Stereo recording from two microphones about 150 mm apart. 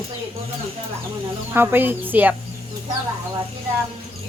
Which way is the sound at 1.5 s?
15° right (ahead or behind).